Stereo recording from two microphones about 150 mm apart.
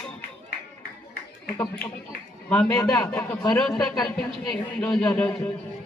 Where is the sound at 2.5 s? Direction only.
10° left (ahead or behind).